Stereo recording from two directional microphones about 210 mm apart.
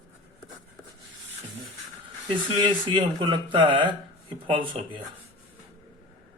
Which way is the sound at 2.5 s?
20° right (ahead or behind).